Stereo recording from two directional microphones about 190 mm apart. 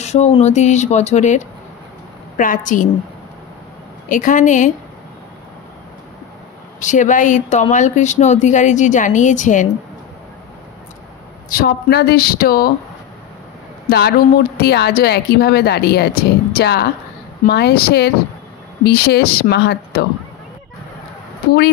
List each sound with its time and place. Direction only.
0.0 s speech: 35° left (ahead or behind)
4.1 s speech: 45° left (ahead or behind)
6.8 s speech: 40° left (ahead or behind)
11.4 s speech: 55° left (ahead or behind)
13.8 s speech: 55° left (ahead or behind)